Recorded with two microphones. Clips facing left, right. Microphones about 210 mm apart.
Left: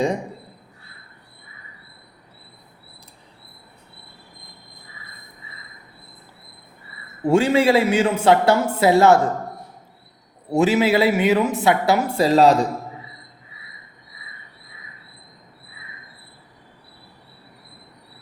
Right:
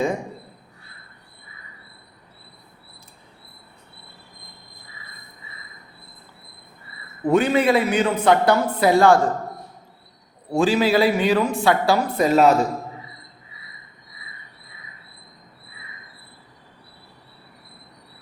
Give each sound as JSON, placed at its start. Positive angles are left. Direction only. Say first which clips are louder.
{"t": 7.3, "sound": "speech", "louder": "left 1 dB", "side_deg": 30}
{"t": 10.5, "sound": "speech", "louder": "left 1 dB", "side_deg": 20}